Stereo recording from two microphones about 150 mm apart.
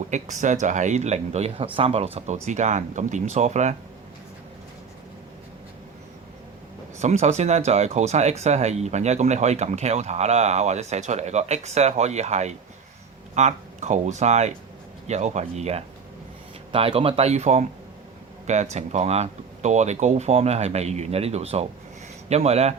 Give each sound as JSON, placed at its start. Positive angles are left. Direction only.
{"t": 0.1, "sound": "speech", "side_deg": -55}
{"t": 7.0, "sound": "speech", "side_deg": -50}